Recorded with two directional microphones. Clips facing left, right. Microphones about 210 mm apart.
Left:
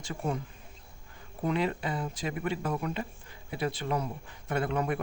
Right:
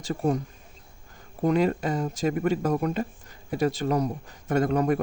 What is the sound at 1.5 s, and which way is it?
Speech, 45° right (ahead or behind).